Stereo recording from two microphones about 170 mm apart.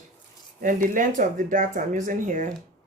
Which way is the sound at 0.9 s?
50° right (ahead or behind).